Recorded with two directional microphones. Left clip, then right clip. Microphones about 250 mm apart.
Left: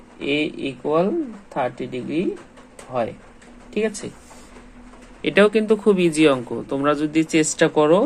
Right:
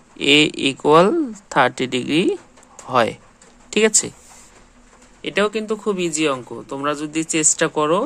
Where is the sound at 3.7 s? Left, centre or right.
Right.